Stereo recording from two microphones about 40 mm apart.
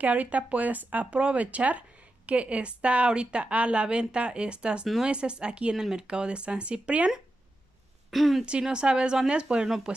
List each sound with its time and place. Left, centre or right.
0.0 s speech: right
8.1 s speech: centre
8.5 s speech: right